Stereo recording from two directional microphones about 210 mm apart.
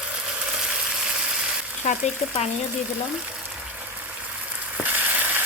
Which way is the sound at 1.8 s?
35° left (ahead or behind).